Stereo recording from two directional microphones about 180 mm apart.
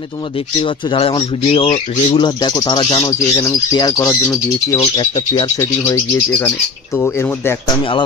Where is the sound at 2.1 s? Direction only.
25° left (ahead or behind).